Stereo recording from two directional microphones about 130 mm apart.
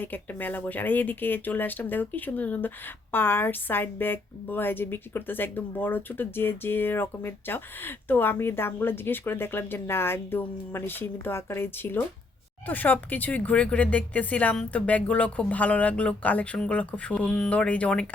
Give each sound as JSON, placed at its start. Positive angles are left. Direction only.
{"t": 0.0, "sound": "speech", "side_deg": 15}